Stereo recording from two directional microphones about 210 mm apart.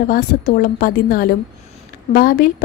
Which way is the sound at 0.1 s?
45° left (ahead or behind).